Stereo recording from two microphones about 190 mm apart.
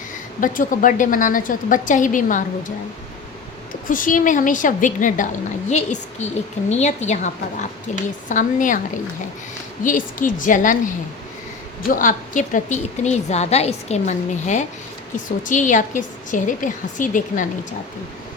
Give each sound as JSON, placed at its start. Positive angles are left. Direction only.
{"t": 0.3, "sound": "a woman's voice", "side_deg": 45}
{"t": 3.8, "sound": "a woman's voice", "side_deg": 45}
{"t": 9.8, "sound": "a woman's voice", "side_deg": 45}
{"t": 11.9, "sound": "a woman's voice", "side_deg": 45}